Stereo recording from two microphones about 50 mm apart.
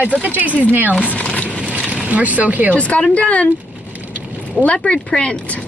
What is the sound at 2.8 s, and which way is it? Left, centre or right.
Speech, left.